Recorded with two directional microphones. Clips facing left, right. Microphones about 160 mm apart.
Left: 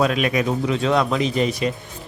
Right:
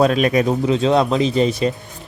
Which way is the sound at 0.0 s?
35° right (ahead or behind).